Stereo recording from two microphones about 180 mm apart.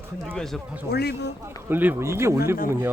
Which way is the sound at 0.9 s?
65° left (ahead or behind).